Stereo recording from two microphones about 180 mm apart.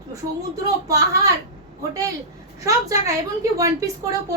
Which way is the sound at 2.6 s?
20° right (ahead or behind).